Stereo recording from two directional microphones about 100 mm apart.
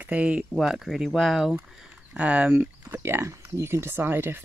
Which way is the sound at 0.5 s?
Centre (ahead or behind).